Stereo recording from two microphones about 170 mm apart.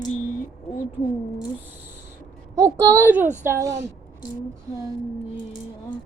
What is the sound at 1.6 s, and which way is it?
Owl, 10° right (ahead or behind).